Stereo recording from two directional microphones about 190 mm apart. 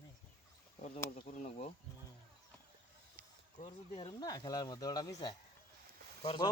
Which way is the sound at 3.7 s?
25° left (ahead or behind).